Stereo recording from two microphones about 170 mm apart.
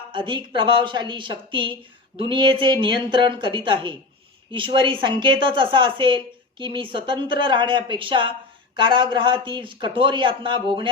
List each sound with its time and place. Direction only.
0.1 s speech: 30° right (ahead or behind)